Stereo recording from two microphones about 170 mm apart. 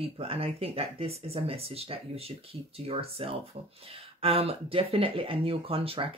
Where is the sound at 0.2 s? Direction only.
35° right (ahead or behind).